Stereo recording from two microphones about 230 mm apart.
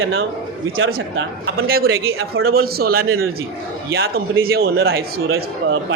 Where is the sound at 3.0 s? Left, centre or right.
Right.